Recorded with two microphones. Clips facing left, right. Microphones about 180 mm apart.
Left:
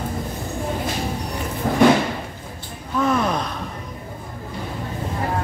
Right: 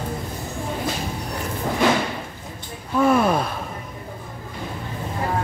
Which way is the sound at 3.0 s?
10° right (ahead or behind).